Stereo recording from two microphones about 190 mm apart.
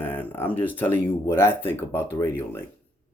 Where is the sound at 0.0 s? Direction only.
10° left (ahead or behind).